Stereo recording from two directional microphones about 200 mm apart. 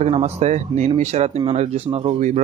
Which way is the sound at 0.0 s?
35° right (ahead or behind).